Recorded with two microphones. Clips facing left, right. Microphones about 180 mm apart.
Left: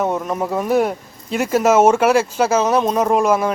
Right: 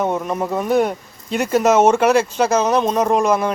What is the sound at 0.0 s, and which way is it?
Speech, centre (ahead or behind).